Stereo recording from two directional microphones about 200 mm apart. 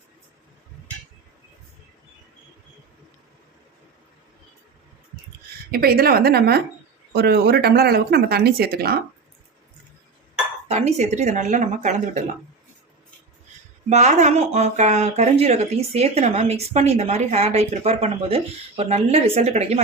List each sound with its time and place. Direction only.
5.7 s speech: 50° right (ahead or behind)
10.7 s speech: 35° right (ahead or behind)
13.9 s speech: 35° right (ahead or behind)